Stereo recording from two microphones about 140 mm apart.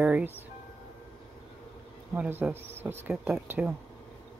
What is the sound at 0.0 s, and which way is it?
Speech, 15° right (ahead or behind).